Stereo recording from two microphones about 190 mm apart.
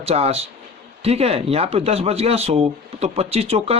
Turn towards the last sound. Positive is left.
turn(degrees=-30)  # may be behind; listen again after turning